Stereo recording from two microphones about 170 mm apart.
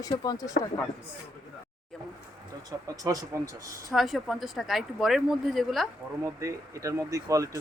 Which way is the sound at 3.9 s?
Centre (ahead or behind).